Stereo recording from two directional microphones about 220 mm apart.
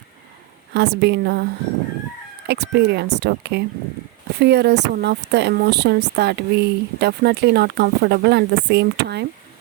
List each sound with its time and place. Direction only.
0.7 s speech: 50° right (ahead or behind)
2.5 s speech: 50° right (ahead or behind)